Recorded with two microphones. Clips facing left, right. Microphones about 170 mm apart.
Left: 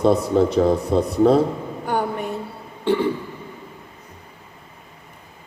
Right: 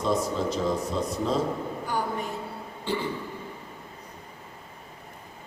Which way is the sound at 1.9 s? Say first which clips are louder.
Left 8 dB; 65° left (ahead or behind).